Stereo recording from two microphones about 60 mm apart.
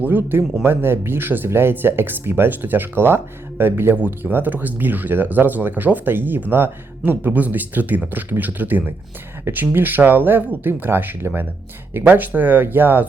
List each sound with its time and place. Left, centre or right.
0.0 s speech: right